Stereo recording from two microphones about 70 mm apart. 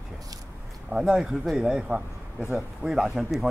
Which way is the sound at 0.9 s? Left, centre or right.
Centre.